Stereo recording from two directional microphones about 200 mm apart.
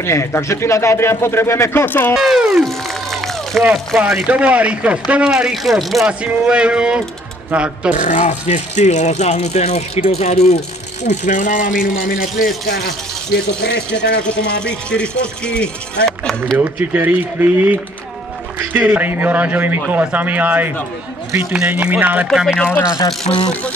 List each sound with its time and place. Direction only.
0.0 s speech: 15° left (ahead or behind)
2.2 s speech: centre (ahead or behind)
7.9 s speech: 35° left (ahead or behind); by 14.2 s 60° left (ahead or behind)
14.6 s speech: 5° left (ahead or behind)
16.5 s speech: 10° right (ahead or behind)
23.3 s speech: 35° left (ahead or behind)